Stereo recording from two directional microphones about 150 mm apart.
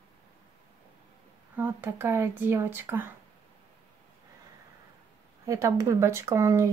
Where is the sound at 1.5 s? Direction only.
15° right (ahead or behind).